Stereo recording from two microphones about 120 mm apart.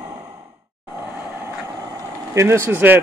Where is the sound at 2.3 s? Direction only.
25° right (ahead or behind).